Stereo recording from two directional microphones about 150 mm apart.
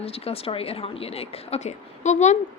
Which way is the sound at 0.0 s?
40° left (ahead or behind).